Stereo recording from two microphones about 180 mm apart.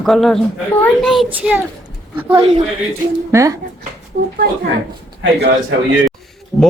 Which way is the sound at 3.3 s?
15° right (ahead or behind).